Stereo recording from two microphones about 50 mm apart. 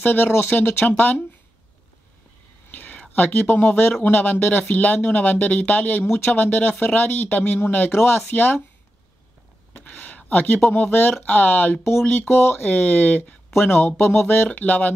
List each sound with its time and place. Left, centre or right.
0.0 s speech: left
2.7 s whispering: left
3.2 s speech: left
9.8 s speech: left
12.6 s speech: left
13.6 s speech: left